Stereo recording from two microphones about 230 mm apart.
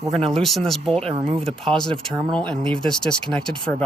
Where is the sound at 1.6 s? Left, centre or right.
Centre.